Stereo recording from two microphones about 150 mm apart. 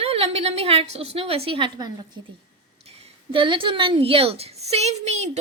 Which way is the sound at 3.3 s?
35° right (ahead or behind).